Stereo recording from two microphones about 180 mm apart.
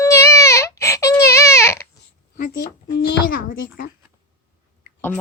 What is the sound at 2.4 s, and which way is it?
Speech, 55° left (ahead or behind).